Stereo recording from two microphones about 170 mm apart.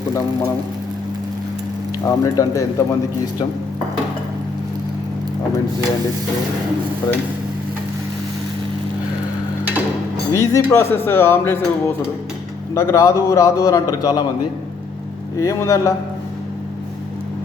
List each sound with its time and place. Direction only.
2.0 s a man's voice: 20° left (ahead or behind)
10.3 s a man's voice: 20° left (ahead or behind)
15.4 s a man's voice: 20° left (ahead or behind)